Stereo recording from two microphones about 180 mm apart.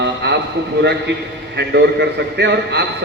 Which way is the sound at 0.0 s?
75° right (ahead or behind).